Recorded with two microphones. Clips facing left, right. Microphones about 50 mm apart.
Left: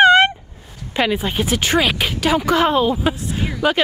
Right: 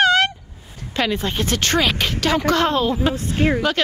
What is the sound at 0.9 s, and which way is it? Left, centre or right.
Speech, centre.